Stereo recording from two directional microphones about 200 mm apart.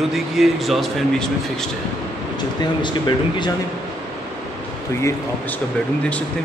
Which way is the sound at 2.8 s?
20° left (ahead or behind).